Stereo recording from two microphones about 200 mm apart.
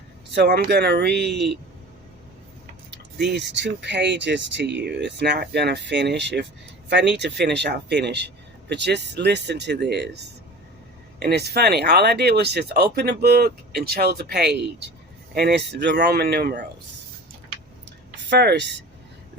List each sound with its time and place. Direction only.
0.3 s speech: 55° right (ahead or behind)
3.2 s speech: 60° right (ahead or behind)
18.3 s speech: 60° right (ahead or behind)